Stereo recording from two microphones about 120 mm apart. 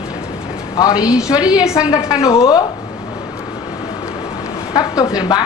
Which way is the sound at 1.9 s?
30° left (ahead or behind).